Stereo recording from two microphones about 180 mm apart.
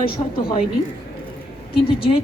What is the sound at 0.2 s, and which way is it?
Speech, 35° left (ahead or behind).